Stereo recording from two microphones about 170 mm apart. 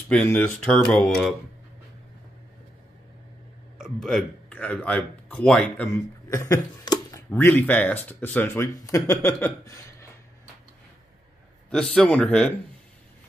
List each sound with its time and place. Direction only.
0.1 s speech: 10° left (ahead or behind)
3.8 s speech: centre (ahead or behind)
6.2 s speech: 15° left (ahead or behind)
11.7 s speech: 5° left (ahead or behind)